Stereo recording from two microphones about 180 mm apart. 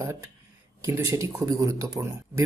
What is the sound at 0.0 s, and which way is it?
Speech, 15° right (ahead or behind).